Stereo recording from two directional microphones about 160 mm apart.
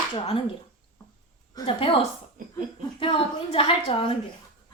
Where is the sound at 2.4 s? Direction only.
60° right (ahead or behind).